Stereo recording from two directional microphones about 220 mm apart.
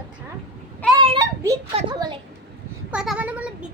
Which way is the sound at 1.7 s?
20° right (ahead or behind).